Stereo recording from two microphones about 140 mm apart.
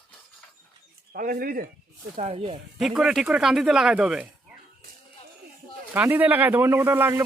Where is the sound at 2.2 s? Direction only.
45° right (ahead or behind).